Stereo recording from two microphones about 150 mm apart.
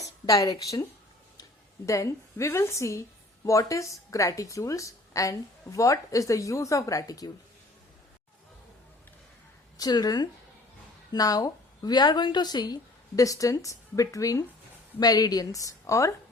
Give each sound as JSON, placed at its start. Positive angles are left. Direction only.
{"t": 0.3, "sound": "a woman's voice", "side_deg": 25}
{"t": 1.9, "sound": "a woman's voice", "side_deg": 20}
{"t": 9.7, "sound": "a woman's voice", "side_deg": 25}